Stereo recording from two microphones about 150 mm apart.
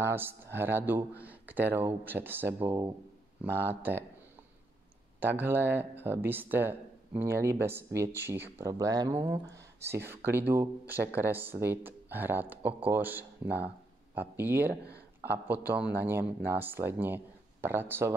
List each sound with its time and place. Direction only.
0.0 s speech: 15° right (ahead or behind)
5.2 s speech: 15° right (ahead or behind)